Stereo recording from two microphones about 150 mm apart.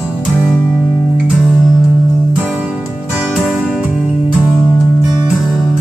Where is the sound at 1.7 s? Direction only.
20° left (ahead or behind).